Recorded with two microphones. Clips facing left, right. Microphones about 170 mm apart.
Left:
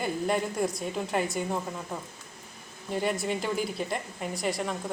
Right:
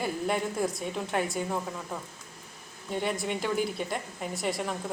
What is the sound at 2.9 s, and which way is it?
A woman's voice, centre (ahead or behind).